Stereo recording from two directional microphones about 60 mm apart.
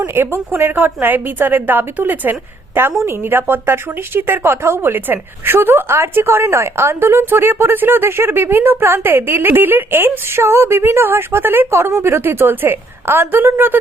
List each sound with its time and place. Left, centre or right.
0.0 s speech: right
3.0 s a woman's voice: right
3.3 s speech: right
11.7 s speech: right